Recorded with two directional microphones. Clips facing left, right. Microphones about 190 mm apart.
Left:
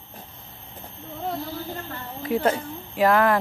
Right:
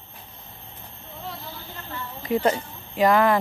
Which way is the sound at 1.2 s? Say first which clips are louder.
Left 8 dB; 50° left (ahead or behind).